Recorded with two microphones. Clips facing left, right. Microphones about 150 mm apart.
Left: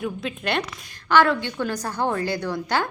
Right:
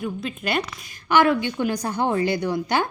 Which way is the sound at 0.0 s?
Centre (ahead or behind).